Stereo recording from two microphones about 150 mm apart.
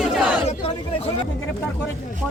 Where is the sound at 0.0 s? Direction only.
5° right (ahead or behind).